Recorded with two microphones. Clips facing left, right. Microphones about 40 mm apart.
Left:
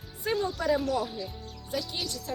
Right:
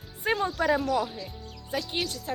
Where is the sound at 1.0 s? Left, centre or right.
Right.